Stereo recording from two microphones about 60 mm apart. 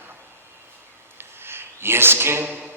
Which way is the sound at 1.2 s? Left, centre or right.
Right.